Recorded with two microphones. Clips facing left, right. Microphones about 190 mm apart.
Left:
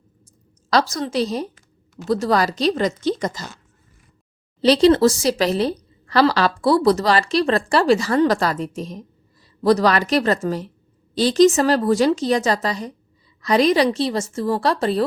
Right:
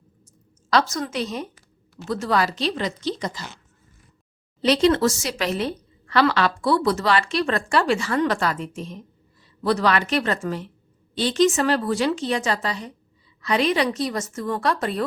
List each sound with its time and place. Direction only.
0.7 s a woman's voice: 35° left (ahead or behind)
4.6 s a woman's voice: 35° left (ahead or behind)